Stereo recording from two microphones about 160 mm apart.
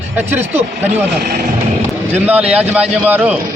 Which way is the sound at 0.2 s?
15° right (ahead or behind).